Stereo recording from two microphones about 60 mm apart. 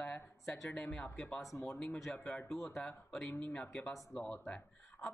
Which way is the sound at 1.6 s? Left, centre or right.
Centre.